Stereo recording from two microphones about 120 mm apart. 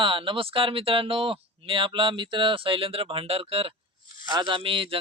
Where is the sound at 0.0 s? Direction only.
45° right (ahead or behind).